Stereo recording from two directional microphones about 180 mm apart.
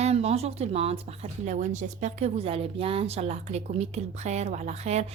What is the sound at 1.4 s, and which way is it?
Speech, 40° right (ahead or behind).